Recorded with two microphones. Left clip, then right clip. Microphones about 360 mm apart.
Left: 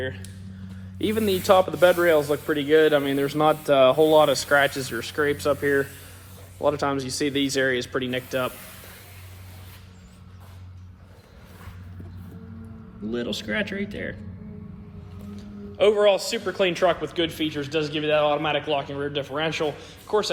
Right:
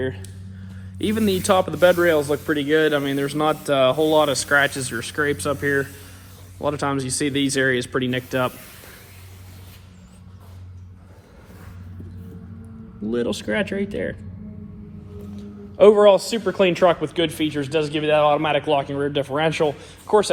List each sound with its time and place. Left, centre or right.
1.0 s speech: right
13.1 s speech: centre
16.0 s a man's voice: centre